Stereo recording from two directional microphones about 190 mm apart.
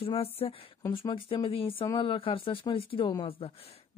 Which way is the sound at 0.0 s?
30° left (ahead or behind).